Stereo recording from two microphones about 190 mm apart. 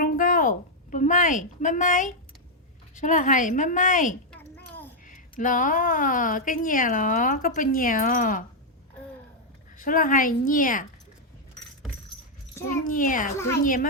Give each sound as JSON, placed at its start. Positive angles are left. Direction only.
{"t": 0.0, "sound": "a sound", "side_deg": 45}
{"t": 2.9, "sound": "a woman's voice", "side_deg": 40}
{"t": 4.3, "sound": "a sound", "side_deg": 10}
{"t": 5.0, "sound": "speech", "side_deg": 45}
{"t": 9.7, "sound": "speech", "side_deg": 45}
{"t": 12.8, "sound": "speech", "side_deg": 45}